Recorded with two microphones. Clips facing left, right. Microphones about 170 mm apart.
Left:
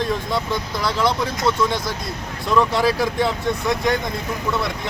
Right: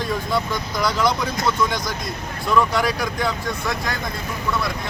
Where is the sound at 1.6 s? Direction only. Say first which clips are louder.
Left 1 dB; 25° left (ahead or behind).